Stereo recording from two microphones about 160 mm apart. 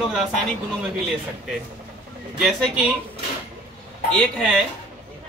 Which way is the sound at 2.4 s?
5° right (ahead or behind).